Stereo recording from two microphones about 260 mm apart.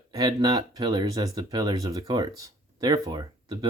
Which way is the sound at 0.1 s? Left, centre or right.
Centre.